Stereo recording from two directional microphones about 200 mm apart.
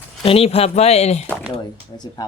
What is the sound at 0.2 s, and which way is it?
Speech, 30° left (ahead or behind).